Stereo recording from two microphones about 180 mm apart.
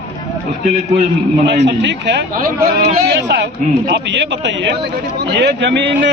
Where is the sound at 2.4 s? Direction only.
55° right (ahead or behind).